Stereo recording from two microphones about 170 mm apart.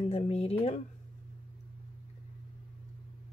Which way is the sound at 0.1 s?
40° left (ahead or behind).